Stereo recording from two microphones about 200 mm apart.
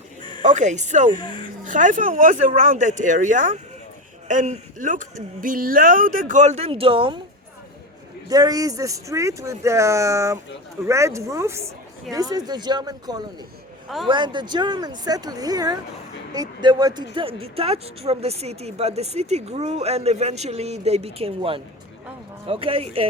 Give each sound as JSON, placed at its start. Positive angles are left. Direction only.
{"t": 0.4, "sound": "a woman's voice", "side_deg": -35}
{"t": 8.3, "sound": "a woman's voice", "side_deg": -20}